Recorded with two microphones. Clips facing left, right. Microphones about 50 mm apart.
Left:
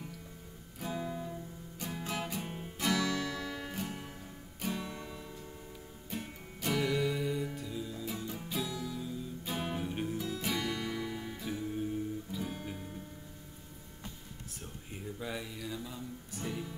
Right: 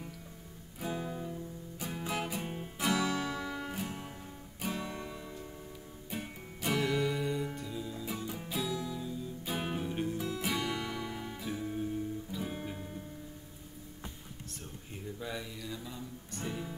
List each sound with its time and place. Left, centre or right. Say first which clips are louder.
0.7 s music: even; centre
2.9 s music: right 1 dB; centre
8.7 s music: right 2 dB; centre
9.0 s music: right 1 dB; centre
12.4 s guitar: right 1 dB; centre
15.1 s music: left 1 dB; centre